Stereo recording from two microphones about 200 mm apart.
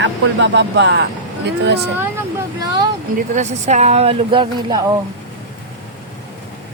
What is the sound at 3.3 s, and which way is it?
Speech, 35° right (ahead or behind).